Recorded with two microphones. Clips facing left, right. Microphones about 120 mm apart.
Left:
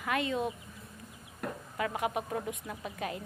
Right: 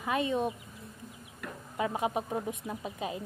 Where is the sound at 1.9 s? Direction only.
30° right (ahead or behind).